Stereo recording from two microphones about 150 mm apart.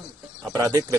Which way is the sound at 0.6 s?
20° right (ahead or behind).